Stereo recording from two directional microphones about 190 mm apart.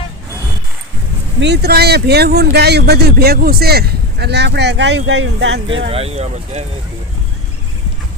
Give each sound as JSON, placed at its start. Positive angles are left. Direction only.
{"t": 1.4, "sound": "speech", "side_deg": -60}
{"t": 5.9, "sound": "speech", "side_deg": -30}